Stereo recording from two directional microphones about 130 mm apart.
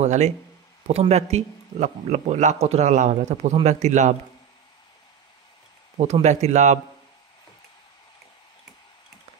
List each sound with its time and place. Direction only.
0.0 s speech: 60° right (ahead or behind)
6.2 s speech: 65° right (ahead or behind)